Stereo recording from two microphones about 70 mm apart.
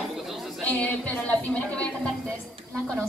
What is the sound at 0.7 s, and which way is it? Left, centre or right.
Speech, left.